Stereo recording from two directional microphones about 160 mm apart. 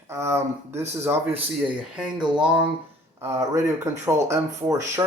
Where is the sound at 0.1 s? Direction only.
15° right (ahead or behind).